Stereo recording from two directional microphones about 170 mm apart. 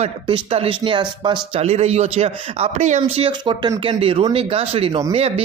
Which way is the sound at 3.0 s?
35° right (ahead or behind).